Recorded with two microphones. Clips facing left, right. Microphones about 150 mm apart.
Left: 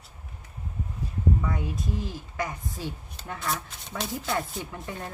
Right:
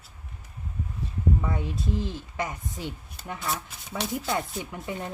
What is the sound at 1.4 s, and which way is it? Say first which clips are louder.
A woman's voice: right 1 dB; 25° right (ahead or behind).